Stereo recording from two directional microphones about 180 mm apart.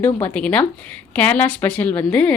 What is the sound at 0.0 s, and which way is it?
Speech, 10° left (ahead or behind).